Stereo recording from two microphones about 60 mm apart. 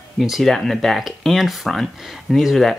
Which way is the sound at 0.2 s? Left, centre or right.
Centre.